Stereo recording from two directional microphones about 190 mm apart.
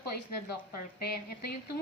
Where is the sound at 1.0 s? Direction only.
55° left (ahead or behind).